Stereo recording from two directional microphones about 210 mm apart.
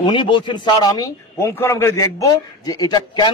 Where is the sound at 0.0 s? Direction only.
20° left (ahead or behind).